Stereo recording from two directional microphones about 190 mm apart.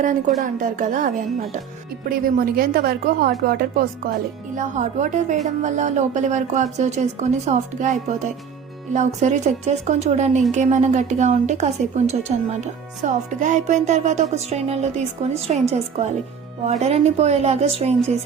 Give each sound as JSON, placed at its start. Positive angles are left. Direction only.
{"t": 0.0, "sound": "speech", "side_deg": -40}
{"t": 4.5, "sound": "speech", "side_deg": -40}